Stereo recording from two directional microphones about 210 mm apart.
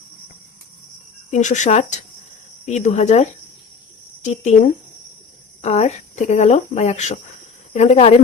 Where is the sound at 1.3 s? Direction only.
35° left (ahead or behind).